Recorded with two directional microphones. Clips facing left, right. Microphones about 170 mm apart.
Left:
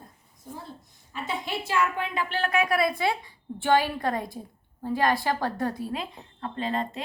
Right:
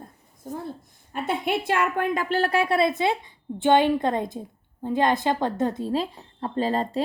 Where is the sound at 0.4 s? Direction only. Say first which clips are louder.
Right 7 dB; 45° right (ahead or behind).